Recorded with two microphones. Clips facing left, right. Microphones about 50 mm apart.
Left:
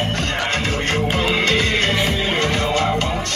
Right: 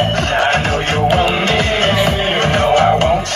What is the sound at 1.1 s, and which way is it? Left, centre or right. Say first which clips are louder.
Music: right 5 dB; right.